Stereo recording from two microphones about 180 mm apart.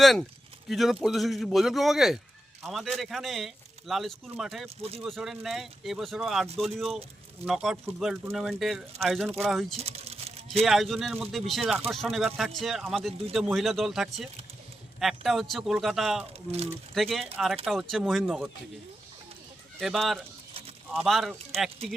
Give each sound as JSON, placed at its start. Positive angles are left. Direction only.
{"t": 0.0, "sound": "speech", "side_deg": 0}
{"t": 9.7, "sound": "vehicle", "side_deg": -35}
{"t": 10.7, "sound": "speech", "side_deg": 0}
{"t": 19.8, "sound": "speech", "side_deg": 0}